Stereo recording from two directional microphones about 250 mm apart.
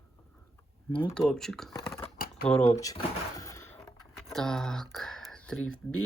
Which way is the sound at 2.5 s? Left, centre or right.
Centre.